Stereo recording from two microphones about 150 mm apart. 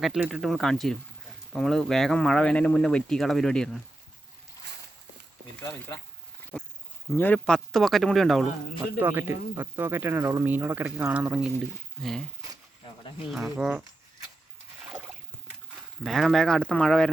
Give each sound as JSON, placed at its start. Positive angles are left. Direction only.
{"t": 0.0, "sound": "speech", "side_deg": -5}
{"t": 5.5, "sound": "speech", "side_deg": 15}
{"t": 7.2, "sound": "speech", "side_deg": 10}
{"t": 9.0, "sound": "speech", "side_deg": -15}
{"t": 13.3, "sound": "speech", "side_deg": 0}
{"t": 16.0, "sound": "speech", "side_deg": 0}